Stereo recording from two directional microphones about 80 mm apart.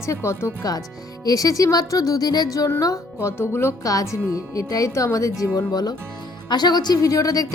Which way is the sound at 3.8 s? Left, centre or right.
Left.